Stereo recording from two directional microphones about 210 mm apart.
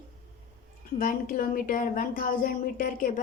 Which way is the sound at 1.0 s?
40° left (ahead or behind).